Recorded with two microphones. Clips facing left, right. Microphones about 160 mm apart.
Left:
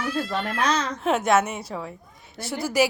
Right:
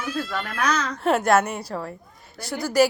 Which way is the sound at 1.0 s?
Centre (ahead or behind).